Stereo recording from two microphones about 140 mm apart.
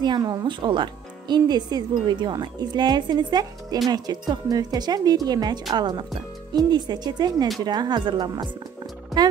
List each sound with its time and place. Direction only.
0.0 s a woman's voice: 30° right (ahead or behind)